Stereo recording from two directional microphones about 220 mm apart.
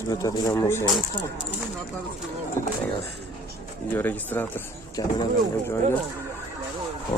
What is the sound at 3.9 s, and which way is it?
Speech, 10° left (ahead or behind).